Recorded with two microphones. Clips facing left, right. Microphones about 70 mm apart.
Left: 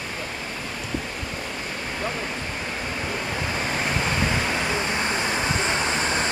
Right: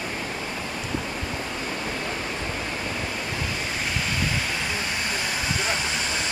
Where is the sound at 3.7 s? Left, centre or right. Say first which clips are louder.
Left 4 dB; left.